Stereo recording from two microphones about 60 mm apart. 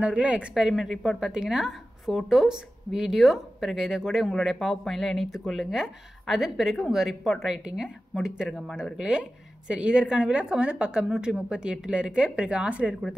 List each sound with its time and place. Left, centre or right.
0.0 s a woman's voice: centre